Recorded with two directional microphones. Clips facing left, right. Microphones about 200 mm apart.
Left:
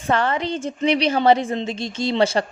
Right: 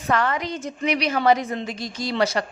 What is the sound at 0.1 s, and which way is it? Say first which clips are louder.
Speech: left 2 dB; 30° left (ahead or behind).